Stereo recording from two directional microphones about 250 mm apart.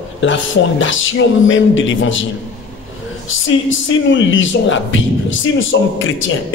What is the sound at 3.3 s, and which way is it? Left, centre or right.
Speech, left.